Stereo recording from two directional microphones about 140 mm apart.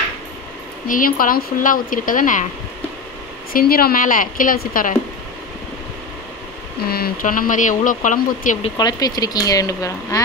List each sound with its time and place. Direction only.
0.8 s speech: 80° left
3.5 s a woman's voice: 90° left
6.9 s speech: 85° left; by 8.5 s 65° left (ahead or behind)
8.7 s speech: 30° left (ahead or behind)